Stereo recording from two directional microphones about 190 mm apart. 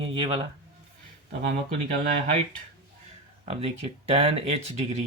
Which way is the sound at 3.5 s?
35° right (ahead or behind).